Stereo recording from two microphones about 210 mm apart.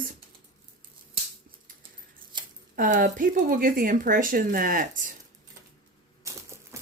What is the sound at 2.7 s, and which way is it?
Speech, 40° right (ahead or behind).